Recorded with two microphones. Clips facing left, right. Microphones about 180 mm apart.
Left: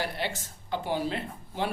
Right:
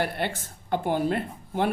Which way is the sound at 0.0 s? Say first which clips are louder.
Right 4 dB; 55° right (ahead or behind).